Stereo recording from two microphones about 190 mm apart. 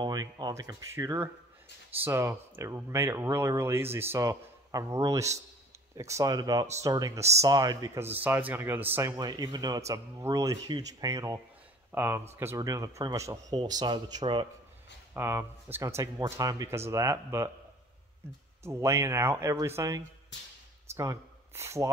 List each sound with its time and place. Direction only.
0.0 s speech: 20° right (ahead or behind)
15.1 s speech: 15° right (ahead or behind)
18.6 s speech: 15° right (ahead or behind)
20.3 s speech: 70° left (ahead or behind)
20.9 s speech: 15° right (ahead or behind)